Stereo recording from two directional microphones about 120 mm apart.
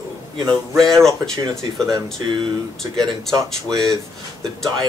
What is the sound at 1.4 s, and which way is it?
Speech, 30° right (ahead or behind).